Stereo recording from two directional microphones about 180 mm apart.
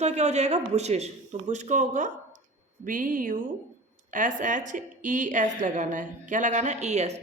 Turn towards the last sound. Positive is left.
turn(degrees=-40)  # may be behind; listen again after turning